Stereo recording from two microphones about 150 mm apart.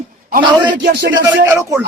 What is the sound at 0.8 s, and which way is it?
Speech, 90° right.